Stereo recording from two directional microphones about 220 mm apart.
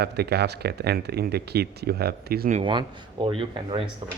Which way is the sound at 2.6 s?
20° right (ahead or behind).